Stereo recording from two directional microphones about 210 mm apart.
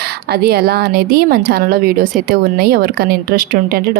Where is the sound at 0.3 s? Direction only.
50° right (ahead or behind).